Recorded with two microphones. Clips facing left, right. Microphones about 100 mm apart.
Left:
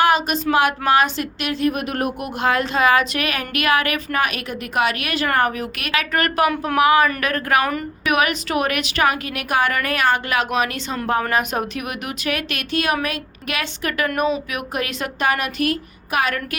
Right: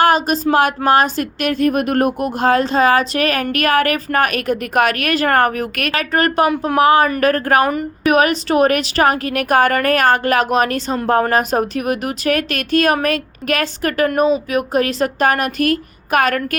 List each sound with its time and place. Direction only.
0.0 s a woman's voice: 40° right (ahead or behind)
6.0 s a woman's voice: 30° right (ahead or behind)
7.7 s a woman's voice: 20° right (ahead or behind)
8.1 s a woman's voice: 35° right (ahead or behind); by 16.6 s 50° right (ahead or behind)